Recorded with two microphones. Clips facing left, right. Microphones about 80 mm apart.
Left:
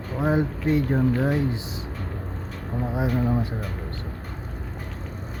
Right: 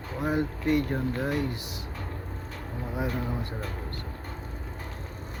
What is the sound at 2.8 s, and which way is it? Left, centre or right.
Speech, left.